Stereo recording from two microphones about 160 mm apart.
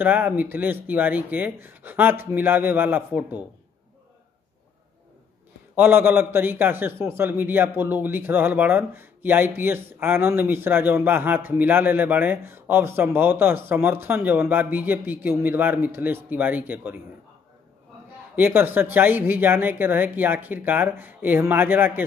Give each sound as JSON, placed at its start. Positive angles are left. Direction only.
{"t": 0.0, "sound": "a man's voice", "side_deg": -10}
{"t": 5.8, "sound": "a man's voice", "side_deg": -15}
{"t": 18.3, "sound": "a man's voice", "side_deg": -15}